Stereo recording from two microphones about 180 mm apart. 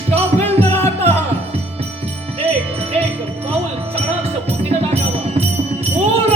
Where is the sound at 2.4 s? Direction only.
35° right (ahead or behind).